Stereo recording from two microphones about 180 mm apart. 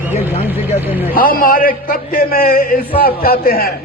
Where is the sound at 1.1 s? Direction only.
55° left (ahead or behind).